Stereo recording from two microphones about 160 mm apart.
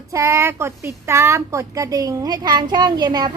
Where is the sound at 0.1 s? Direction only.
15° right (ahead or behind).